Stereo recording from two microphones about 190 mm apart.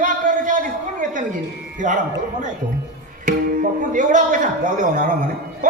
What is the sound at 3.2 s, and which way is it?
A woman's voice, 45° right (ahead or behind).